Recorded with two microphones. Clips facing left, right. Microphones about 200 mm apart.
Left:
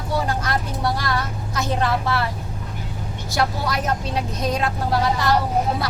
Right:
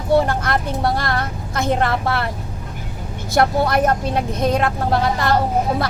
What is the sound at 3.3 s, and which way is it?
Speech, 55° right (ahead or behind).